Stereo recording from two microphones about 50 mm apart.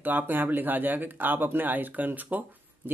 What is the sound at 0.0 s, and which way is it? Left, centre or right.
Speech, right.